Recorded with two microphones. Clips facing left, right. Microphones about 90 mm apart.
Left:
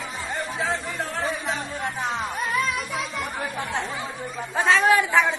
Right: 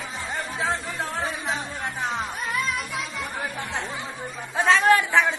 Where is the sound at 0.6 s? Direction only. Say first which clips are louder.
Right 1 dB; 20° right (ahead or behind).